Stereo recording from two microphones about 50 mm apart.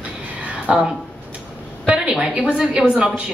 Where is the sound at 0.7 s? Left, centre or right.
Centre.